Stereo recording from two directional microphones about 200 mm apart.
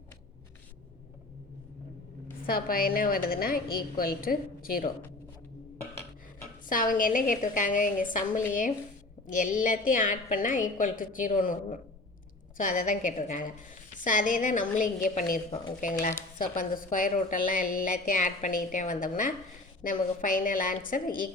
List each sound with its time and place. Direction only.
2.5 s a woman's voice: 45° left (ahead or behind)
6.7 s a woman's voice: 45° left (ahead or behind)